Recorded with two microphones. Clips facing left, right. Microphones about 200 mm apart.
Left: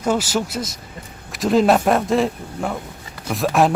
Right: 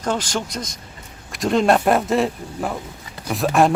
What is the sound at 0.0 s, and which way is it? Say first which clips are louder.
Speech: left 3 dB; 5° left (ahead or behind).